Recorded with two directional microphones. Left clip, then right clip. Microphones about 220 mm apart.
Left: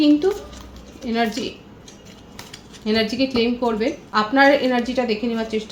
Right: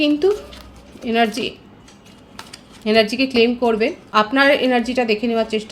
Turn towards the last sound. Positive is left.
turn(degrees=-50)  # may be behind; listen again after turning